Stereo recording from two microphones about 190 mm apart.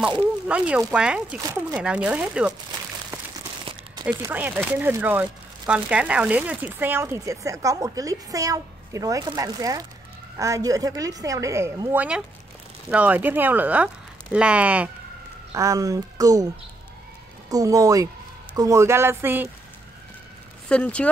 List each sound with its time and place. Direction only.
0.5 s speech: 5° right (ahead or behind)
4.0 s speech: 10° right (ahead or behind)
17.5 s speech: 20° right (ahead or behind)
20.6 s speech: 5° left (ahead or behind)